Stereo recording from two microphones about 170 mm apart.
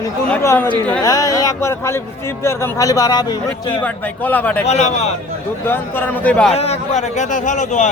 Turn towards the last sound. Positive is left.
turn(degrees=45)  # may be behind; listen again after turning